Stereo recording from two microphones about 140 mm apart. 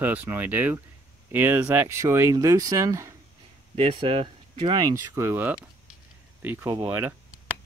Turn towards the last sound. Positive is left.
turn(degrees=-15)  # may be behind; listen again after turning